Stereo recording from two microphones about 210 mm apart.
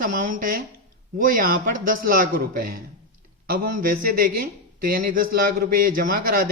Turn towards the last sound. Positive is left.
turn(degrees=-45)  # may be behind; listen again after turning